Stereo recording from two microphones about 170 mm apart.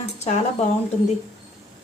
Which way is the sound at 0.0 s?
40° left (ahead or behind).